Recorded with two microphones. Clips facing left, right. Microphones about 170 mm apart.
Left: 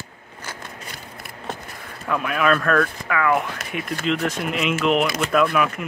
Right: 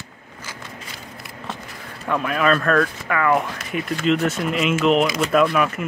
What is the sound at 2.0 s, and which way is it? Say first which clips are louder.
Speech: right 1 dB; centre (ahead or behind).